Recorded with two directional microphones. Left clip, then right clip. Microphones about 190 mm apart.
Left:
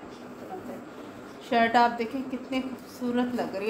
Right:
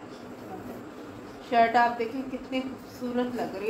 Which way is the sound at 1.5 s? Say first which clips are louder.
Even; 55° left (ahead or behind).